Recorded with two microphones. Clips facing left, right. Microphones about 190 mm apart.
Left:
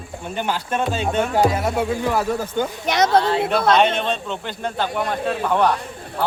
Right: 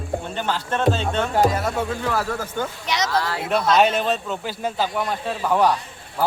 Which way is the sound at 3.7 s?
5° right (ahead or behind).